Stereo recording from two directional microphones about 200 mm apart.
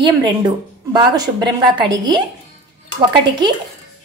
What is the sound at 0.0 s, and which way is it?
A woman's voice, 20° right (ahead or behind).